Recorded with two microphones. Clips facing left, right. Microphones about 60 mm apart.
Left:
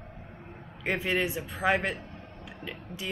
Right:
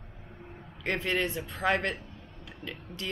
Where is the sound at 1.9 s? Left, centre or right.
Left.